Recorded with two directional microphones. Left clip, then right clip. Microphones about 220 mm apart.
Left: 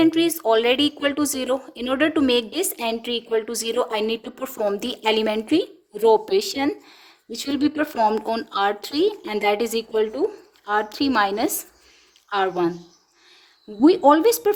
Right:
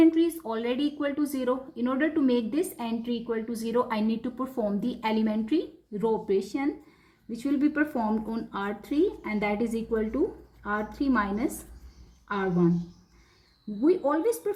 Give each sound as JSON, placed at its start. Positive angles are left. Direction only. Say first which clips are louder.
{"t": 0.0, "sound": "a woman's voice", "louder": "left 4 dB", "side_deg": 50}
{"t": 13.8, "sound": "a woman's voice", "louder": "left 10 dB", "side_deg": 50}